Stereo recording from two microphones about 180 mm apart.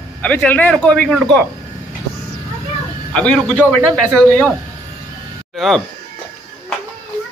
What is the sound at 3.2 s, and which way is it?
Speech, 5° left (ahead or behind).